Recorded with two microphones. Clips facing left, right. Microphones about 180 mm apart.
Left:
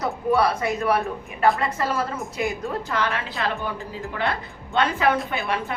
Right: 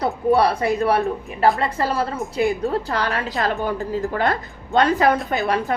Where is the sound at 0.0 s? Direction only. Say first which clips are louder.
Right 4 dB; 35° right (ahead or behind).